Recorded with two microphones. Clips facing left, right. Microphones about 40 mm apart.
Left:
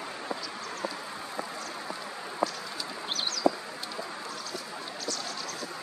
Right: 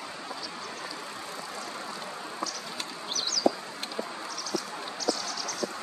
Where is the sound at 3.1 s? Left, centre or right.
Left.